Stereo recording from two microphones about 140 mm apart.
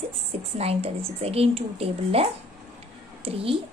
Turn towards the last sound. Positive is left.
turn(degrees=-45)  # may be behind; listen again after turning